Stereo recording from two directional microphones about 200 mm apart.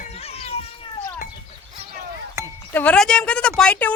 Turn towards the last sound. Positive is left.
turn(degrees=5)  # may be behind; listen again after turning